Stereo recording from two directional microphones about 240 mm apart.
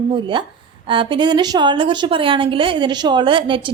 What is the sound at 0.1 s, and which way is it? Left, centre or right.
A woman's voice, centre.